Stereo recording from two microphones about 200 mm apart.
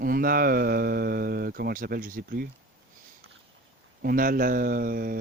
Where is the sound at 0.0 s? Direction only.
45° right (ahead or behind).